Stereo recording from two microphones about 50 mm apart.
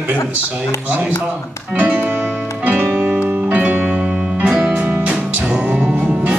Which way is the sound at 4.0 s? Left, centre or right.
Right.